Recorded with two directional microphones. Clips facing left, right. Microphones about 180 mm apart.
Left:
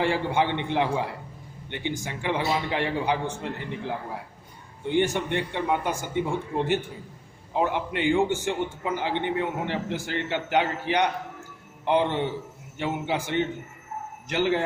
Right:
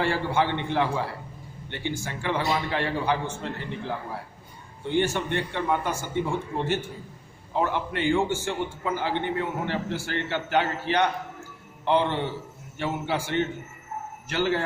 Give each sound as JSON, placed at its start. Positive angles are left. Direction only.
{"t": 0.0, "sound": "a man's voice", "side_deg": 15}